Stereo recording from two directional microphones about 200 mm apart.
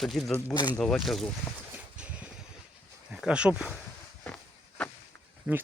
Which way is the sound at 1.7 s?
5° right (ahead or behind).